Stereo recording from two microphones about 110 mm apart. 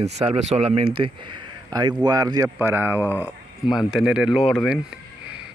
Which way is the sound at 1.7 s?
35° right (ahead or behind).